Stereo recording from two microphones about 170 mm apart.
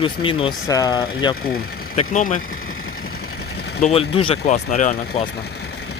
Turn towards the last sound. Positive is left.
turn(degrees=45)  # may be behind; listen again after turning